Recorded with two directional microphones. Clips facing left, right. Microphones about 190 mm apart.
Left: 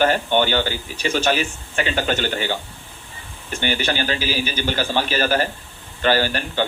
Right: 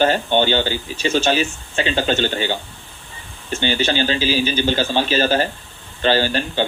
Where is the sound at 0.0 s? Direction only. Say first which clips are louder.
Right 1 dB; 25° right (ahead or behind).